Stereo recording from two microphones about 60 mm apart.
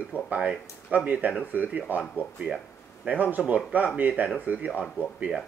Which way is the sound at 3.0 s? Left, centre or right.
Right.